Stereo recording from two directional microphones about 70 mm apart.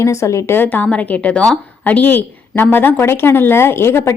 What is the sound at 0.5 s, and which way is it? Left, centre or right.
A woman's voice, left.